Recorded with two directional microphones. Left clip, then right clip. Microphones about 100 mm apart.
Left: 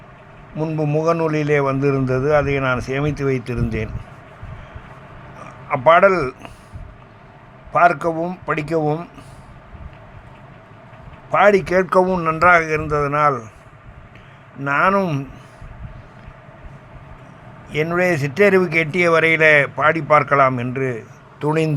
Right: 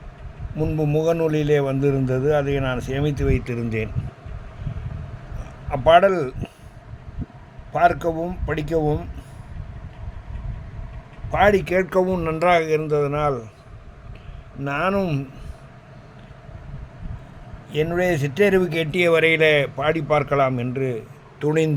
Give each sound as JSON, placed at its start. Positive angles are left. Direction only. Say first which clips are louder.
{"t": 0.5, "sound": "a man's voice", "louder": "left 1 dB", "side_deg": -30}
{"t": 5.4, "sound": "speech", "louder": "left 5 dB", "side_deg": -25}
{"t": 7.7, "sound": "speech", "louder": "left 4 dB", "side_deg": -20}
{"t": 11.3, "sound": "a man's voice", "louder": "left 4 dB", "side_deg": -15}
{"t": 12.0, "sound": "speech", "louder": "left 5 dB", "side_deg": -30}
{"t": 14.6, "sound": "speech", "louder": "left 6 dB", "side_deg": -25}
{"t": 17.7, "sound": "speech", "louder": "left 3 dB", "side_deg": -20}